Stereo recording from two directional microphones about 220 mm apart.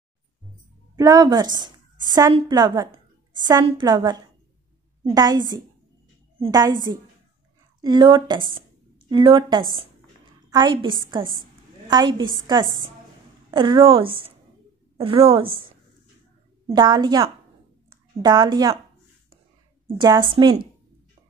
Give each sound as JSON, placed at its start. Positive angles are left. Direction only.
{"t": 0.9, "sound": "a woman's voice", "side_deg": -15}
{"t": 6.4, "sound": "a woman's voice", "side_deg": -20}
{"t": 13.5, "sound": "a woman's voice", "side_deg": -25}
{"t": 20.0, "sound": "a woman's voice", "side_deg": -20}